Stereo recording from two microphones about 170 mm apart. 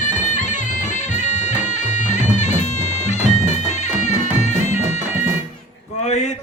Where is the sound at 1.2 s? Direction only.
45° left (ahead or behind).